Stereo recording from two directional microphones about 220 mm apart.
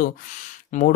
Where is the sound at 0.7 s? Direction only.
35° left (ahead or behind).